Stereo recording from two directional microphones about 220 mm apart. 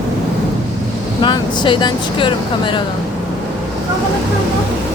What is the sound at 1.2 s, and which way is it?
Speech, 20° left (ahead or behind).